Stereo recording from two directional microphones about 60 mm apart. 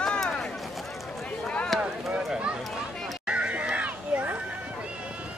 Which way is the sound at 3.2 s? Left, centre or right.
Centre.